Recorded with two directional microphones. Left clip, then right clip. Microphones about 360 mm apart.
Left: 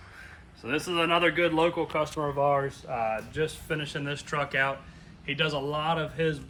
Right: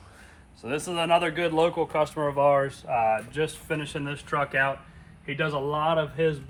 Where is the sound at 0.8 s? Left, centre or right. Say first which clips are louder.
Right 1 dB; right.